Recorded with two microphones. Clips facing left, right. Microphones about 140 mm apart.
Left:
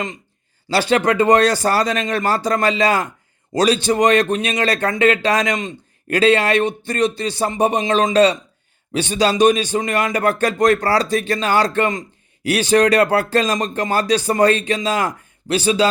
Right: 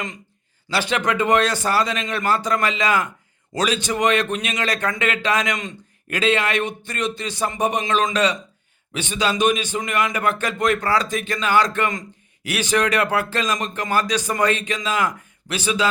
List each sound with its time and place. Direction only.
0.7 s a man's voice: 35° left (ahead or behind)
5.5 s a sound: 25° left (ahead or behind)
6.1 s a man's voice: 35° left (ahead or behind)